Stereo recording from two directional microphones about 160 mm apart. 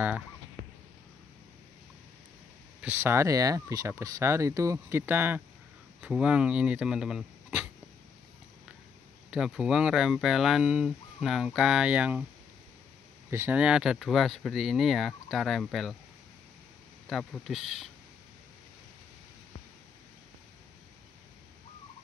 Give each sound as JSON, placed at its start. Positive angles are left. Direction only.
{"t": 2.8, "sound": "fowl", "side_deg": -15}
{"t": 9.3, "sound": "speech", "side_deg": -5}
{"t": 13.3, "sound": "speech", "side_deg": -15}
{"t": 17.1, "sound": "speech", "side_deg": 0}